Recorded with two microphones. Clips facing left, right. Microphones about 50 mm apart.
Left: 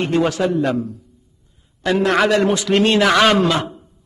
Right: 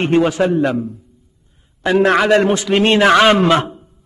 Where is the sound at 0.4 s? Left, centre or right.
Right.